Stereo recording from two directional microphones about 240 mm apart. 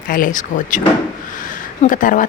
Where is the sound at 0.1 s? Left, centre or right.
Left.